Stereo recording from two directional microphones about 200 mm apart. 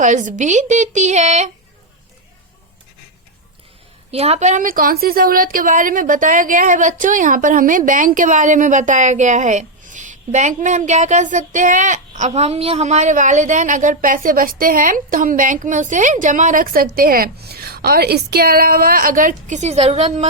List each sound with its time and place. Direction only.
0.0 s a woman's voice: 40° right (ahead or behind)
4.1 s a woman's voice: 30° right (ahead or behind)